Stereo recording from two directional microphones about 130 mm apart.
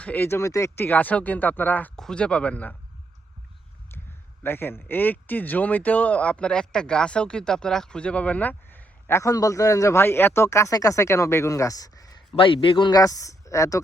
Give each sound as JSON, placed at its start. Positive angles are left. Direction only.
{"t": 0.0, "sound": "speech", "side_deg": 15}
{"t": 4.4, "sound": "speech", "side_deg": 15}
{"t": 12.4, "sound": "speech", "side_deg": 40}